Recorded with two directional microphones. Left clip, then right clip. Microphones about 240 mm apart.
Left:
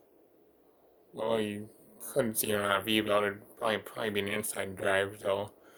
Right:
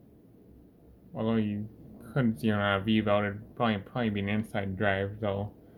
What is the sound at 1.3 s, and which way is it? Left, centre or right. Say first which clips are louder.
Speech: left 1 dB; left.